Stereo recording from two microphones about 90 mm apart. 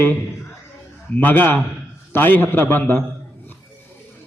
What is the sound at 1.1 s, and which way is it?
A man's voice, 20° left (ahead or behind).